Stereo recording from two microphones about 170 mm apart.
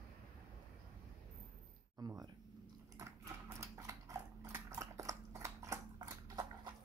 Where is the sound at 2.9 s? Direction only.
20° right (ahead or behind).